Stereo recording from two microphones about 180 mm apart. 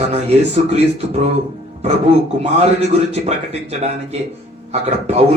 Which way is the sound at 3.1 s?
35° right (ahead or behind).